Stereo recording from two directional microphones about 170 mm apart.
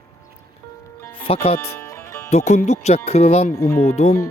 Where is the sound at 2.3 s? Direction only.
45° left (ahead or behind).